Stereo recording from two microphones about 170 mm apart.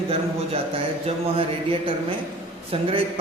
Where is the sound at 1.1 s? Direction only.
35° right (ahead or behind).